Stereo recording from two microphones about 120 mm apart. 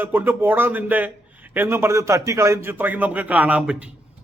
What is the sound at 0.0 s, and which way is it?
A man's voice, 15° right (ahead or behind).